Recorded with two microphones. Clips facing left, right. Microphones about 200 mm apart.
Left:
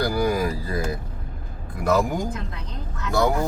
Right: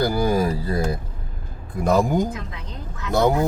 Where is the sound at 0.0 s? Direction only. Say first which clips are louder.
Right 2 dB; 25° right (ahead or behind).